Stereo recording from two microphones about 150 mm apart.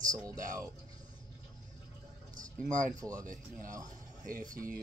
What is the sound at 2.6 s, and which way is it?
Speech, 60° right (ahead or behind).